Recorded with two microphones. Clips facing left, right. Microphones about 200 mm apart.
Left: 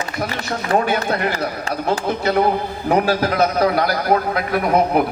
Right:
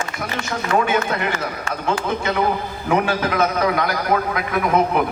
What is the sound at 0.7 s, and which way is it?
Speech, 35° left (ahead or behind).